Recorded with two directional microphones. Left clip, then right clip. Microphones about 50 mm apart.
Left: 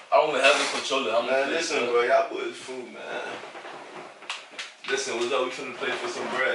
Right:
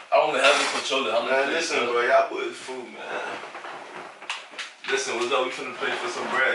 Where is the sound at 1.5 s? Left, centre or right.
Centre.